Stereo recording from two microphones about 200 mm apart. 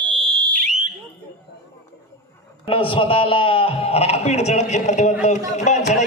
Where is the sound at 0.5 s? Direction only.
35° right (ahead or behind).